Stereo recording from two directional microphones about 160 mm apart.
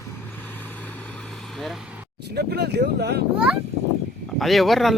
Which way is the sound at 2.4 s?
90° right.